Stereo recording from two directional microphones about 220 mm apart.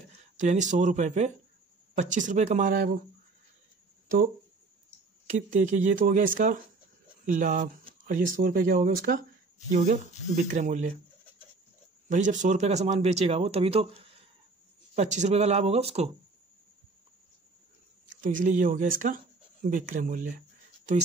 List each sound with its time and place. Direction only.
0.4 s speech: 35° right (ahead or behind)
5.2 s speech: 35° right (ahead or behind)
12.1 s a man's voice: 35° right (ahead or behind)
15.0 s a man's voice: 30° right (ahead or behind)
18.2 s speech: 35° right (ahead or behind)